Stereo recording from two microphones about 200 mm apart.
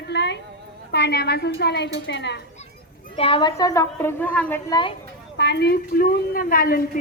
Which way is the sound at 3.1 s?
25° left (ahead or behind).